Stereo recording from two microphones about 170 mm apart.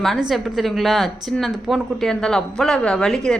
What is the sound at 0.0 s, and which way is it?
A man's voice, centre (ahead or behind).